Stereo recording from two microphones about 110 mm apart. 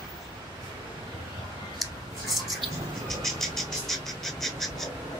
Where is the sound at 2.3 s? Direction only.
Centre (ahead or behind).